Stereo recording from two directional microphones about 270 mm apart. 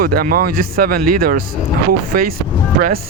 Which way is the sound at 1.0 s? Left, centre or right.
Right.